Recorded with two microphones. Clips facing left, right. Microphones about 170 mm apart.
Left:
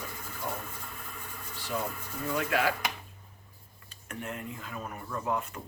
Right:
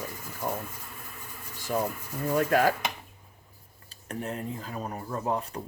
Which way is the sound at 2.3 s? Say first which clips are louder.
Right 6 dB; 45° right (ahead or behind).